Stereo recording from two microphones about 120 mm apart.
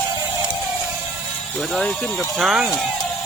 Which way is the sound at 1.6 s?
Centre (ahead or behind).